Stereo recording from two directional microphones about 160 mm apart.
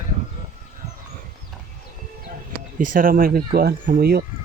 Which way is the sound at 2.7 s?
60° right (ahead or behind).